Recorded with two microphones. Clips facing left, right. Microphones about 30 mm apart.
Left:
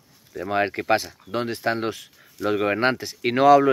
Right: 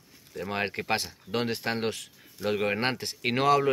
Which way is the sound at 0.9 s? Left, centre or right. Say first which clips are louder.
Left 6 dB; centre.